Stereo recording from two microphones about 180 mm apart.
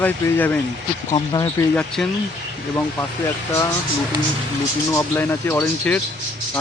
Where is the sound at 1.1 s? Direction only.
25° left (ahead or behind).